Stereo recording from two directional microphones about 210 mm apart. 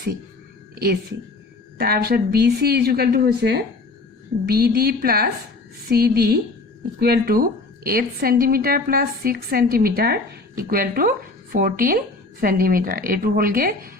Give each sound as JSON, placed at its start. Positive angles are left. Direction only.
{"t": 1.8, "sound": "a woman's voice", "side_deg": -45}